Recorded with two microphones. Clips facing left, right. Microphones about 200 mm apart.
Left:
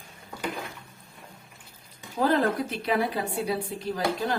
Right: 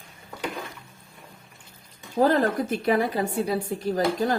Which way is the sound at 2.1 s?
45° right (ahead or behind).